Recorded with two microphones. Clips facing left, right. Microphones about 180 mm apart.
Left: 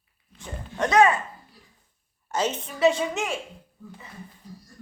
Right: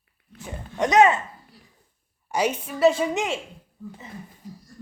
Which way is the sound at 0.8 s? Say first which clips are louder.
Right 2 dB; 20° right (ahead or behind).